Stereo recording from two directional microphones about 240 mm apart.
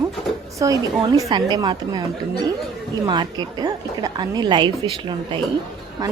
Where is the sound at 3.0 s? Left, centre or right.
Centre.